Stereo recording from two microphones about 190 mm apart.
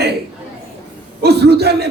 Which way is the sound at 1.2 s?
60° right (ahead or behind).